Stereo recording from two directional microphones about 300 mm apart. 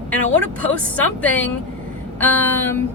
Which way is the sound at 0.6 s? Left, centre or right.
Centre.